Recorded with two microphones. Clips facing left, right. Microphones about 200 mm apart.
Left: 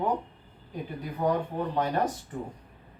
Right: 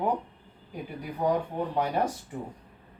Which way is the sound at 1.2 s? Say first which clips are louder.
Even; 10° right (ahead or behind).